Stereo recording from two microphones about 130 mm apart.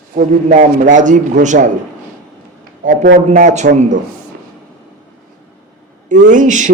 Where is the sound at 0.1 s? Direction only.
80° right.